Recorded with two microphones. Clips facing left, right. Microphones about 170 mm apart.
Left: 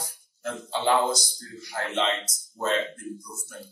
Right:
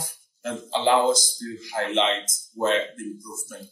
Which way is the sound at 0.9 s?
90° right.